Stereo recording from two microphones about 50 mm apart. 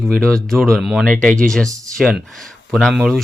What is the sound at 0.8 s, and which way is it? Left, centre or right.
Speech, centre.